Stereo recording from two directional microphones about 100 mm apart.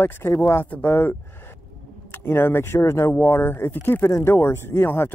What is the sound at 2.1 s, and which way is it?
Speech, 20° left (ahead or behind).